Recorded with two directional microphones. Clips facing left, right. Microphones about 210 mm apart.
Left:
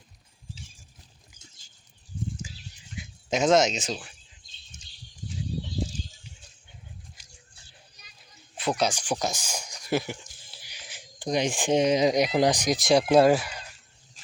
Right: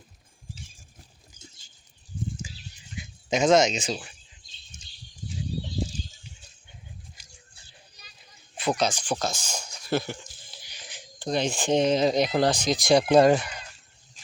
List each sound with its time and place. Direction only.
3.0 s speech: centre (ahead or behind)
7.2 s a sound: centre (ahead or behind)
8.8 s speech: 10° left (ahead or behind)
12.7 s speech: centre (ahead or behind)